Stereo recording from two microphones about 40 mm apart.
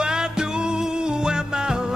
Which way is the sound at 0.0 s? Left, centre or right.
Centre.